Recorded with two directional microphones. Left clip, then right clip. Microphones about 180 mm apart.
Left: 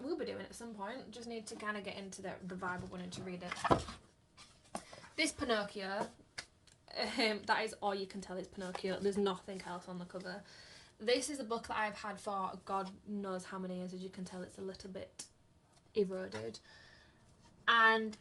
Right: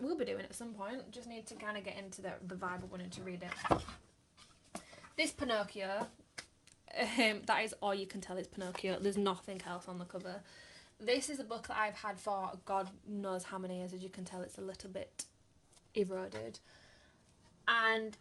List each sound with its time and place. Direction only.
0.0 s a sound: 55° right (ahead or behind)
1.1 s a woman's voice: 35° right (ahead or behind)
5.1 s a woman's voice: 40° right (ahead or behind)
17.7 s a woman's voice: 35° right (ahead or behind)